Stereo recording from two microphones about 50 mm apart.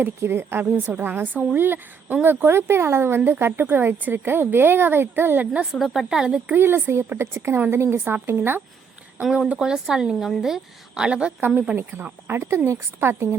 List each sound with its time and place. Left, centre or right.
0.2 s a woman's voice: right
5.8 s a woman's voice: centre
6.5 s speech: right
9.6 s a woman's voice: centre
11.1 s a woman's voice: right
11.3 s a woman's voice: right
11.8 s speech: right
12.4 s a woman's voice: right